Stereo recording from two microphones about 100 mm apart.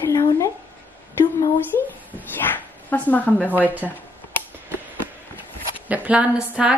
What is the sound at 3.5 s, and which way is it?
Speech, 15° right (ahead or behind).